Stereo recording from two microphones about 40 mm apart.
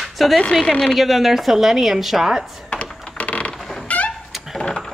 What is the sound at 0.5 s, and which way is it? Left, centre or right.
Speech, left.